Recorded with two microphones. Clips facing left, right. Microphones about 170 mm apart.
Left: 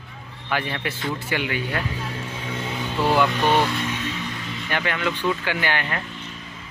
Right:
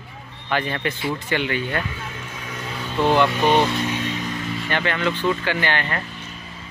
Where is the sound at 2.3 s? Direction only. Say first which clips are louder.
Left 2 dB; 25° left (ahead or behind).